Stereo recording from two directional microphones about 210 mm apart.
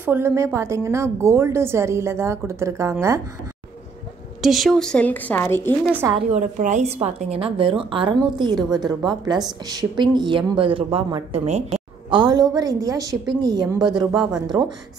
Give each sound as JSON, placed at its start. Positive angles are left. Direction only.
{"t": 0.0, "sound": "a woman's voice", "side_deg": -10}
{"t": 4.4, "sound": "a woman's voice", "side_deg": 0}
{"t": 6.3, "sound": "speech", "side_deg": -35}